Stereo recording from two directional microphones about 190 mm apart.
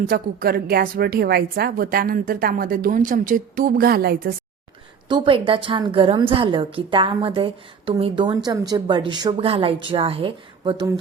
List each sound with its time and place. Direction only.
0.1 s a woman's voice: 50° right (ahead or behind)
5.0 s a woman's voice: 25° right (ahead or behind)